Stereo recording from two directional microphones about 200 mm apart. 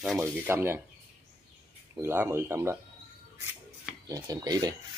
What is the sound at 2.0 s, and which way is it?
Speech, 10° right (ahead or behind).